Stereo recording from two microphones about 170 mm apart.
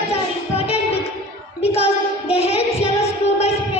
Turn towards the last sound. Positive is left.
turn(degrees=35)  # may be behind; listen again after turning